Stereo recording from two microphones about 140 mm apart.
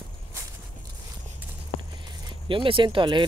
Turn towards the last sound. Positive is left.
turn(degrees=-35)  # may be behind; listen again after turning